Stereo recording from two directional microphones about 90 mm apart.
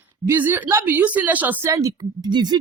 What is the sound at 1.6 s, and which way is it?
Speech, 35° right (ahead or behind).